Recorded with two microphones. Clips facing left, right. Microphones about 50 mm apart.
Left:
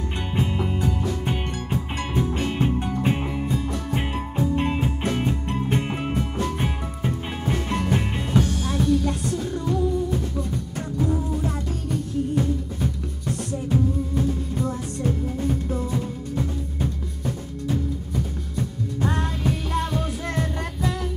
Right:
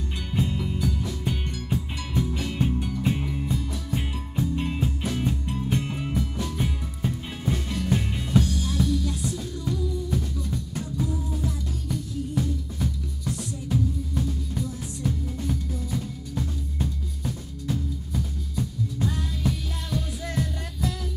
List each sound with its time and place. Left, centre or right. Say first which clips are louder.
0.4 s music: left 2 dB; left
8.5 s music: left 4 dB; left